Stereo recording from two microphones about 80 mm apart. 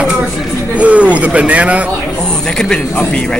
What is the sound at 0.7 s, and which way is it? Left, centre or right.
Speech, centre.